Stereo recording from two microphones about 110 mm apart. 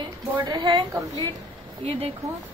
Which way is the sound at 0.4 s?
40° right (ahead or behind).